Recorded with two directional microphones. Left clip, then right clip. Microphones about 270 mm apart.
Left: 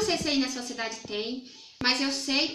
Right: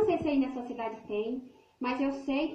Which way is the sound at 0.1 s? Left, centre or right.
Left.